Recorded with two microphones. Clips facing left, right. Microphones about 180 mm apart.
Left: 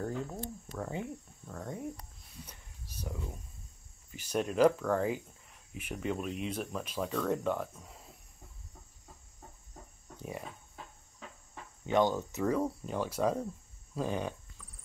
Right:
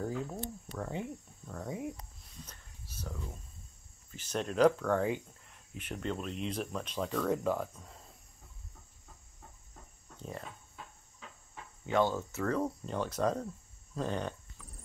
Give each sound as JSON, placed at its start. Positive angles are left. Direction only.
{"t": 0.0, "sound": "speech", "side_deg": -5}
{"t": 1.5, "sound": "a sound", "side_deg": -5}
{"t": 2.4, "sound": "a sound", "side_deg": 15}
{"t": 4.1, "sound": "speech", "side_deg": 10}
{"t": 10.1, "sound": "cricket", "side_deg": 10}
{"t": 11.8, "sound": "cricket", "side_deg": 20}
{"t": 12.5, "sound": "cricket", "side_deg": 5}